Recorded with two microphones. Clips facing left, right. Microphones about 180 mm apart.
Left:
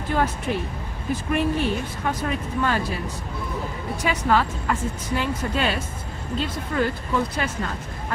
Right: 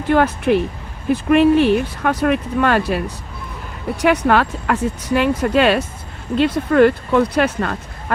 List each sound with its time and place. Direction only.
0.1 s speech: 70° right (ahead or behind)
4.0 s speech: 70° right (ahead or behind)